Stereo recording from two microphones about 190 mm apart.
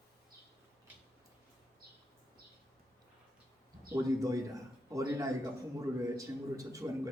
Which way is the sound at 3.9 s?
15° right (ahead or behind).